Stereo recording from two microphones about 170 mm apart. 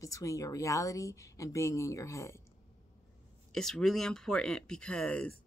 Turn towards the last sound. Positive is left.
turn(degrees=5)  # may be behind; listen again after turning